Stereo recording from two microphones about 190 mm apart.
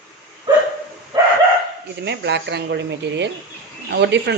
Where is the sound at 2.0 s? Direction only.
65° right (ahead or behind).